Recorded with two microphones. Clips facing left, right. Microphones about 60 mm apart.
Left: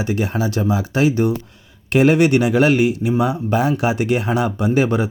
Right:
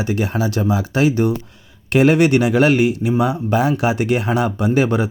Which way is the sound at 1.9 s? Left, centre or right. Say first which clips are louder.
Even; right.